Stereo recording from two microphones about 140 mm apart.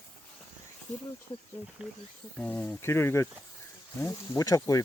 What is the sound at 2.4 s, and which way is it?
Speech, 10° left (ahead or behind).